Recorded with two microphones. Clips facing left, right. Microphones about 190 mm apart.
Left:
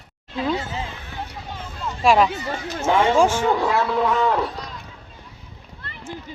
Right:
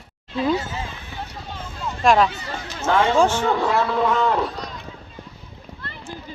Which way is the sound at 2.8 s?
15° left (ahead or behind).